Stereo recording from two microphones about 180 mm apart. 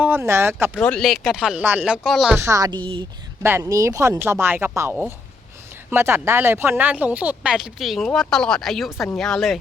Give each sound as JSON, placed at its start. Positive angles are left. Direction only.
{"t": 0.0, "sound": "speech", "side_deg": -10}
{"t": 0.8, "sound": "speech", "side_deg": 5}
{"t": 2.4, "sound": "speech", "side_deg": -20}
{"t": 3.4, "sound": "speech", "side_deg": -15}